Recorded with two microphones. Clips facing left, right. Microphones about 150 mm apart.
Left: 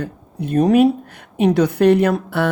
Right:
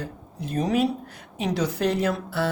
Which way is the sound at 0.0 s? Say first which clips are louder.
Left 8 dB; 65° left (ahead or behind).